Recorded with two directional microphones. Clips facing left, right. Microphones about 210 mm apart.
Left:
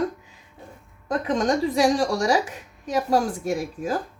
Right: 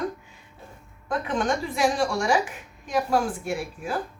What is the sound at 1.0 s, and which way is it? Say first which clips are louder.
A woman's voice: left 3 dB; 35° left (ahead or behind).